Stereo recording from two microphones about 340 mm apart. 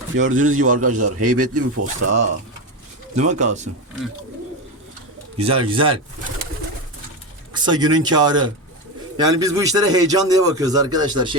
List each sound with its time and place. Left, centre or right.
0.2 s a man's voice: right
0.5 s a man's voice: right
0.8 s a man's voice: right
3.2 s a man's voice: right
5.4 s a man's voice: centre
7.5 s a man's voice: centre